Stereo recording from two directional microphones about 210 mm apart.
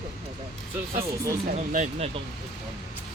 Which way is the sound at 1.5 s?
35° right (ahead or behind).